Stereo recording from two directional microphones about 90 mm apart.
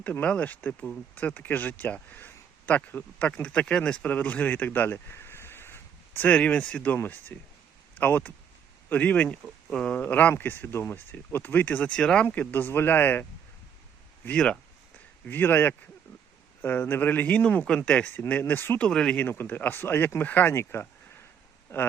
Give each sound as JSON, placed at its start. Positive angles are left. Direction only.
{"t": 0.0, "sound": "speech", "side_deg": 15}
{"t": 14.3, "sound": "speech", "side_deg": 10}
{"t": 15.3, "sound": "speech", "side_deg": 20}
{"t": 18.9, "sound": "speech", "side_deg": 10}
{"t": 19.2, "sound": "speech", "side_deg": 25}